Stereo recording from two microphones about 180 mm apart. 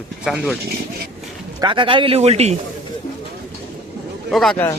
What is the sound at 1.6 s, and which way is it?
Speech, 25° right (ahead or behind).